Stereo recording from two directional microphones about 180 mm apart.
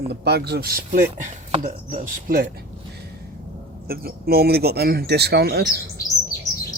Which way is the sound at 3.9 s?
55° right (ahead or behind).